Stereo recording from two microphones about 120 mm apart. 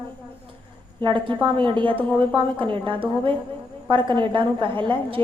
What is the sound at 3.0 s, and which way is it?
A woman's voice, 45° right (ahead or behind).